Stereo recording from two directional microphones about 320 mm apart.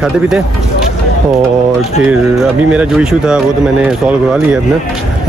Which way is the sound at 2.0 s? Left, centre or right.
Centre.